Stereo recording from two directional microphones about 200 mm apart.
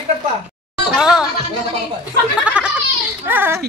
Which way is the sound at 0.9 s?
Centre (ahead or behind).